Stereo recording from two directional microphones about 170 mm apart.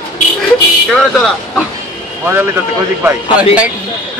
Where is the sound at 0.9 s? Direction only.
5° left (ahead or behind).